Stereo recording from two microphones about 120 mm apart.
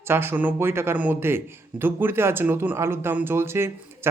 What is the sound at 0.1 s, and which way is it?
Speech, 20° right (ahead or behind).